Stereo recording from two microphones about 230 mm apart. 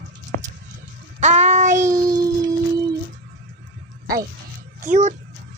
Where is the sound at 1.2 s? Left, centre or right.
Right.